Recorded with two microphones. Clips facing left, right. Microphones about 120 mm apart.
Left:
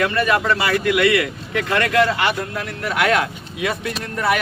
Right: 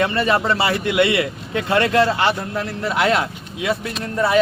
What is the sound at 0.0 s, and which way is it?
A man's voice, 25° right (ahead or behind).